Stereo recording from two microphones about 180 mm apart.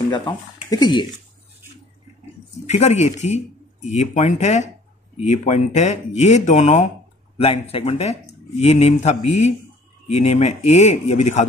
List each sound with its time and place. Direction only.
0.1 s speech: 25° left (ahead or behind)
2.6 s speech: 40° left (ahead or behind)